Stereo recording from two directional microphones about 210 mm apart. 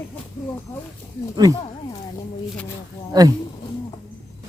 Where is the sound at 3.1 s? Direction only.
20° right (ahead or behind).